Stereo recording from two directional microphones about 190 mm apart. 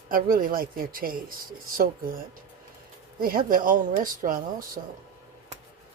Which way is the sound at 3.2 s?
50° right (ahead or behind).